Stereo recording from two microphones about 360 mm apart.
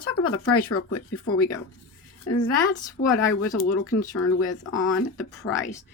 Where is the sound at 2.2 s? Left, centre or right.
Left.